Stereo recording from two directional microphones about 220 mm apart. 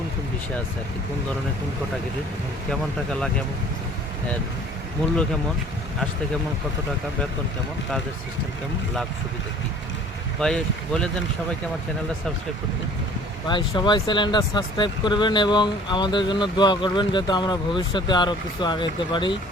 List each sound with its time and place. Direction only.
10.4 s speech: 5° left (ahead or behind)
13.5 s speech: 20° left (ahead or behind)